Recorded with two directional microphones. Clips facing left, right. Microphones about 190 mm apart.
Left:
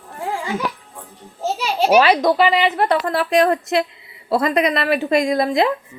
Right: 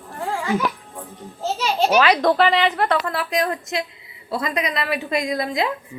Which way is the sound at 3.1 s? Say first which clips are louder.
Left 7 dB; 55° left (ahead or behind).